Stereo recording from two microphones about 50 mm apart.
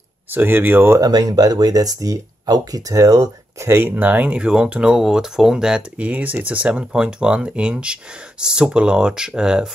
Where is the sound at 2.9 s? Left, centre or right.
Right.